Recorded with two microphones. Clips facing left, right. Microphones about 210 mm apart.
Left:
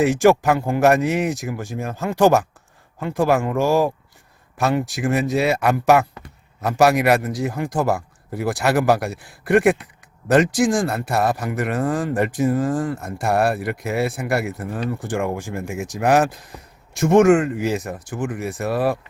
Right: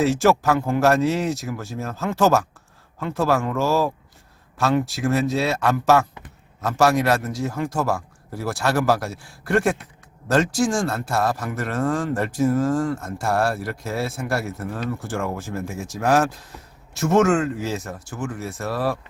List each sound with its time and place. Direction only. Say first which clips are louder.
0.0 s speech: left 3 dB; 15° left (ahead or behind)